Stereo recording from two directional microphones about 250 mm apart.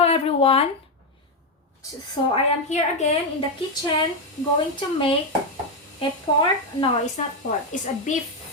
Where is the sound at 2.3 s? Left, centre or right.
Left.